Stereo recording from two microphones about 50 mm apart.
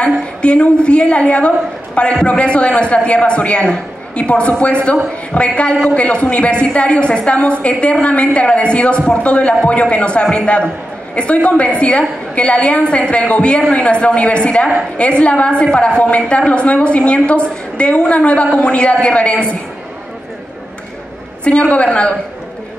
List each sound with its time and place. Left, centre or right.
0.0 s a woman's voice: left
21.5 s a woman's voice: left